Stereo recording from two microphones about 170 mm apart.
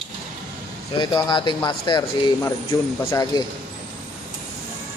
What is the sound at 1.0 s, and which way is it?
Speech, 25° left (ahead or behind).